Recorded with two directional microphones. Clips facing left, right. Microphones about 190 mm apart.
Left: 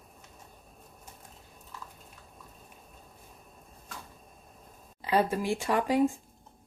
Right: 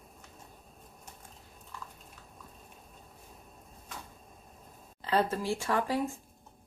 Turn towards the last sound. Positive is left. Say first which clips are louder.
# left 5 dB
turn(degrees=15)  # may be behind; listen again after turning